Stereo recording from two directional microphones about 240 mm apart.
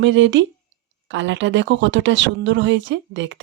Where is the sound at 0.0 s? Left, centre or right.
Right.